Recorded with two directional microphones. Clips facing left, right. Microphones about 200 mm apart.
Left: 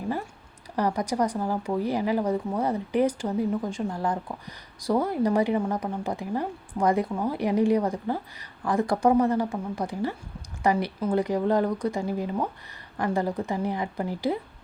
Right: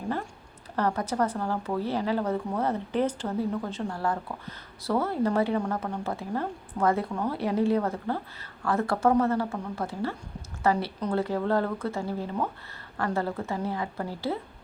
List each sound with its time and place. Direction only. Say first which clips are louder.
0.8 s a woman's voice: left 1 dB; 15° left (ahead or behind)